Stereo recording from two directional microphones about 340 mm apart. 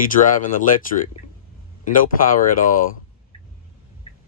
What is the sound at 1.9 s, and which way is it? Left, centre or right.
Speech, left.